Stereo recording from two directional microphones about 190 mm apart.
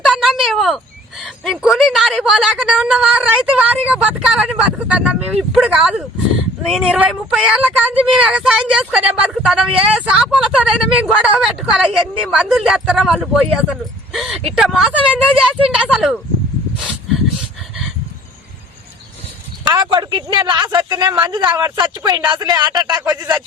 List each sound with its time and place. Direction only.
0.0 s a sound: centre (ahead or behind)
1.2 s a woman's voice: centre (ahead or behind)
19.6 s a man's voice: 25° right (ahead or behind)